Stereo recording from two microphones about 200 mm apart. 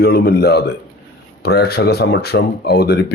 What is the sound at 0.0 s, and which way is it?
Speech, 50° left (ahead or behind).